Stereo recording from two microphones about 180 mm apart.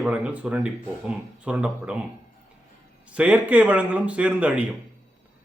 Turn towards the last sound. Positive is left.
turn(degrees=-5)  # may be behind; listen again after turning